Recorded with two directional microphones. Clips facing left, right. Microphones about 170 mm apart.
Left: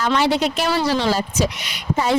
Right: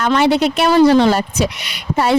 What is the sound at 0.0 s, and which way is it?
Speech, 60° right (ahead or behind).